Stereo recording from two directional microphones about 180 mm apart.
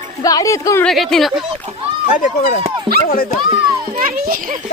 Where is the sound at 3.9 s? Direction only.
45° right (ahead or behind).